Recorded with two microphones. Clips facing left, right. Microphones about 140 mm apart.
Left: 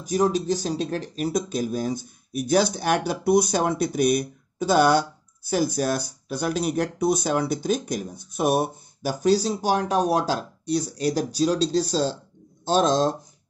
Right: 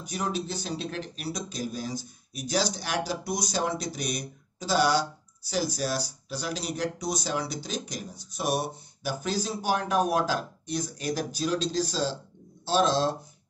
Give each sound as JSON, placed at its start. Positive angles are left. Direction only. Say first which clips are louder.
{"t": 0.0, "sound": "speech", "louder": "left 9 dB", "side_deg": 45}